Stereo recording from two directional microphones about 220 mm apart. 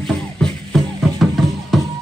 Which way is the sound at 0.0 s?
Centre (ahead or behind).